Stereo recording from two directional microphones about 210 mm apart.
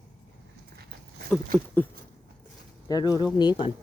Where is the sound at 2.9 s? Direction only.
20° left (ahead or behind).